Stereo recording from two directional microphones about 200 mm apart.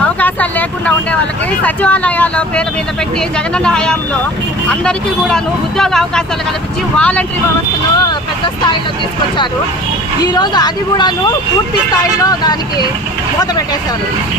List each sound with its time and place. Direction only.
0.2 s vehicle: 5° left (ahead or behind)
1.6 s speech: 5° left (ahead or behind)
10.3 s speech: 20° left (ahead or behind)